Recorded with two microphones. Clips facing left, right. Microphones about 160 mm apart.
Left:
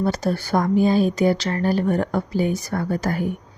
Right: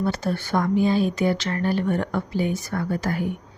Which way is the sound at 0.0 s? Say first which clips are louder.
Left 3 dB; 40° left (ahead or behind).